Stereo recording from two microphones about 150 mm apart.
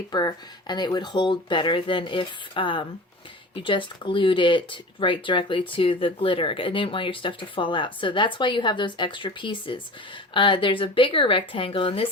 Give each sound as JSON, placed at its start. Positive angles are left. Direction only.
{"t": 0.1, "sound": "speech", "side_deg": 30}